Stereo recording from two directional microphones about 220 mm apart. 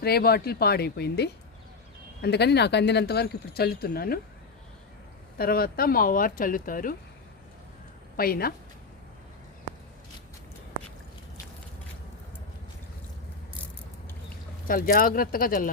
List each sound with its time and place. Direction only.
0.0 s speech: 45° left (ahead or behind)
5.4 s speech: 45° left (ahead or behind)
8.1 s a woman's voice: 45° left (ahead or behind)
14.7 s speech: 40° left (ahead or behind)